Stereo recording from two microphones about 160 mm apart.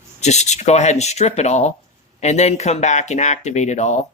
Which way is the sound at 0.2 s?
45° left (ahead or behind).